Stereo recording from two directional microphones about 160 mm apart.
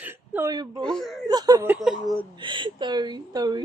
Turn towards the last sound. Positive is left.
turn(degrees=-25)  # may be behind; listen again after turning